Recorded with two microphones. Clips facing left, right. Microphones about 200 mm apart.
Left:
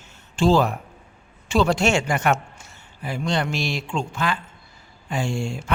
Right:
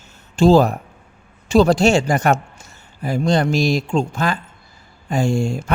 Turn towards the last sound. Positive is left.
turn(degrees=-40)  # may be behind; listen again after turning